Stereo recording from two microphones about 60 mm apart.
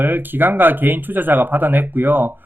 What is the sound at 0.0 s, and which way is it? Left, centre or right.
Speech, right.